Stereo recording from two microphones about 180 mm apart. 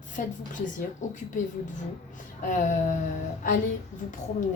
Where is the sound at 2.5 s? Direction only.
45° left (ahead or behind).